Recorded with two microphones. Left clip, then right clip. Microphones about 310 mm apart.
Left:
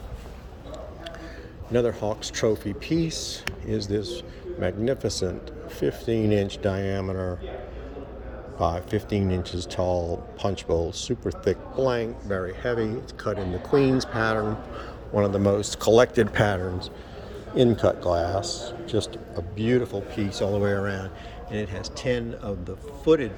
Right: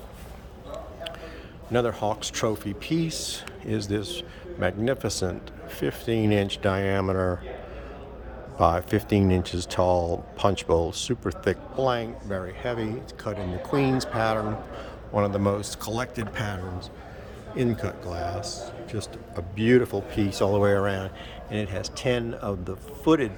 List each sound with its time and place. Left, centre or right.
1.7 s speech: centre
8.5 s speech: centre
17.6 s speech: centre
19.4 s speech: centre